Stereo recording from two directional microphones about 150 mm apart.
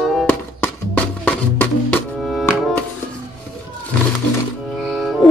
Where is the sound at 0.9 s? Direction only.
10° left (ahead or behind).